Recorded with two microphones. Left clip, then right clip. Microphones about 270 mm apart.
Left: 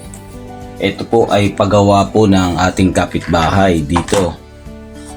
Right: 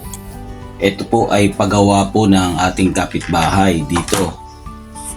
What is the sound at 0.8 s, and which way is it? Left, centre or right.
Speech, right.